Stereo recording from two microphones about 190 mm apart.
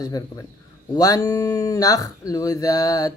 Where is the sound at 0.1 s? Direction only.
20° left (ahead or behind).